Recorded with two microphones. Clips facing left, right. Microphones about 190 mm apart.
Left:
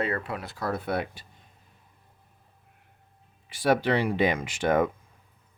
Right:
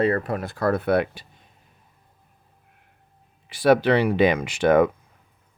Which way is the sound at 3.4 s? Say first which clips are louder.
Right 6 dB; 70° right (ahead or behind).